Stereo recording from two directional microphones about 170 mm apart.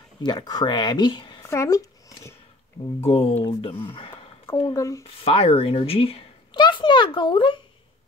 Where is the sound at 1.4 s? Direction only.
20° left (ahead or behind).